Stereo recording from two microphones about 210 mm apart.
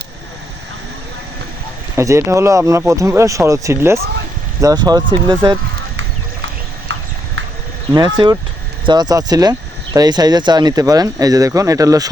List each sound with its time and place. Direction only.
2.0 s speech: 15° right (ahead or behind)
6.0 s clip-clop: 60° right (ahead or behind)
7.9 s speech: 20° right (ahead or behind)